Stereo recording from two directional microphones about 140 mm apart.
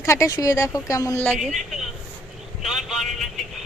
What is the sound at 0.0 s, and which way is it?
Speech, 20° left (ahead or behind).